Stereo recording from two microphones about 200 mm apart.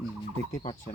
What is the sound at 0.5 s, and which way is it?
Speech, 35° left (ahead or behind).